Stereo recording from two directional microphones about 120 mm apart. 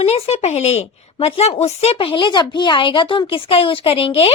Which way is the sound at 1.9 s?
45° left (ahead or behind).